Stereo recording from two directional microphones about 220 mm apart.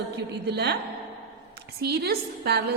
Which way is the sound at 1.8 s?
45° right (ahead or behind).